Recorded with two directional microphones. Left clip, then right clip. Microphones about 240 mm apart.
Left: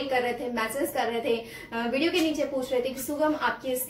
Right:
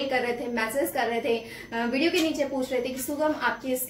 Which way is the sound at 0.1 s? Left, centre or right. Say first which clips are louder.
Even; centre.